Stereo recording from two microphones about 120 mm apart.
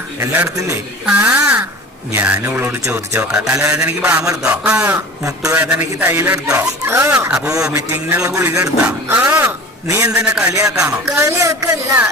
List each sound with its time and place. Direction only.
1.0 s speech: 10° right (ahead or behind)
3.2 s speech: 5° right (ahead or behind)
4.9 s speech: 25° right (ahead or behind)
5.5 s speech: 10° right (ahead or behind)
6.1 s speech: 20° right (ahead or behind)
8.2 s speech: 25° right (ahead or behind)
8.8 s speech: 15° right (ahead or behind)
10.1 s speech: 5° right (ahead or behind)
10.5 s speech: 25° right (ahead or behind)